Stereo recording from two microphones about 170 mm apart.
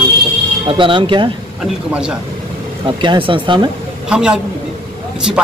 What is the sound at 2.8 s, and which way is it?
Speech, 30° right (ahead or behind).